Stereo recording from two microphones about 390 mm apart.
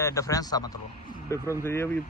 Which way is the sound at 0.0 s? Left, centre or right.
Centre.